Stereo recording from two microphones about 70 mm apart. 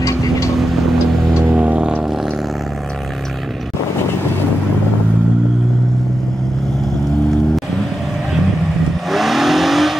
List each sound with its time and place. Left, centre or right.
0.0 s vehicle: left
1.3 s vehicle: centre
9.1 s vehicle: centre